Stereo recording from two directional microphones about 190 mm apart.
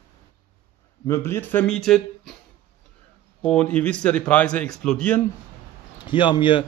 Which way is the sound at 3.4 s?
5° left (ahead or behind).